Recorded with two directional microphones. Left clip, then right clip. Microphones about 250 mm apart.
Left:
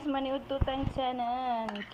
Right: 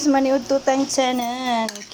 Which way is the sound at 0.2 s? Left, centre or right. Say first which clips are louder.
Right 14 dB; right.